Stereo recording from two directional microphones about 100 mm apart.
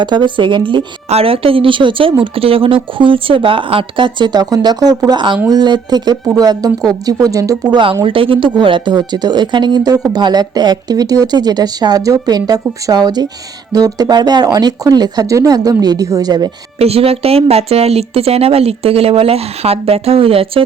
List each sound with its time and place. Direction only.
0.0 s speech: 50° right (ahead or behind)
1.1 s a woman's voice: 70° right (ahead or behind); by 7.5 s 35° right (ahead or behind)
7.7 s a woman's voice: 55° right (ahead or behind); by 16.5 s 40° right (ahead or behind)
16.7 s speech: 85° right; by 20.7 s 70° right (ahead or behind)